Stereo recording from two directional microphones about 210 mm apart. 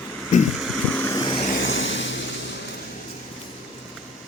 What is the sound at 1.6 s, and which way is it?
Vehicle, 65° left (ahead or behind).